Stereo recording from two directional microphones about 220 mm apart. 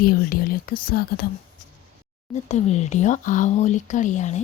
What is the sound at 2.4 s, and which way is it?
Speech, 30° left (ahead or behind).